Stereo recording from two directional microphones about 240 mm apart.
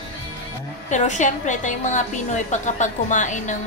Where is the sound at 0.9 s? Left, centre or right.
Left.